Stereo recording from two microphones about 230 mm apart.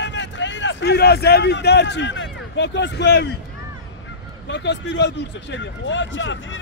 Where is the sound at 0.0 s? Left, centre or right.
Left.